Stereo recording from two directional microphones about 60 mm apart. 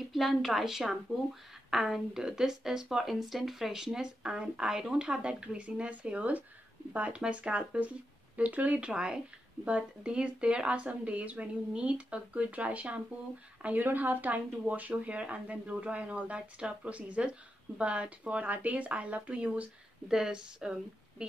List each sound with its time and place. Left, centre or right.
0.1 s a woman's voice: centre
20.1 s speech: centre